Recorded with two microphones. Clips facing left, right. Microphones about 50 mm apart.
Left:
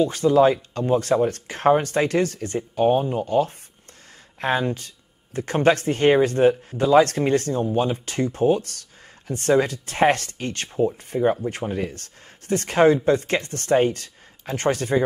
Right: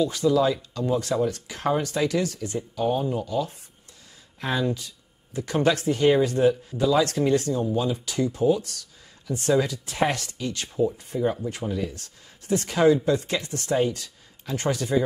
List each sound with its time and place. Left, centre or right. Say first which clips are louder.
0.0 s speech: left 4 dB; left